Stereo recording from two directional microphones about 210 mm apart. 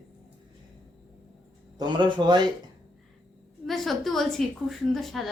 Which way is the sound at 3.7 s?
Centre (ahead or behind).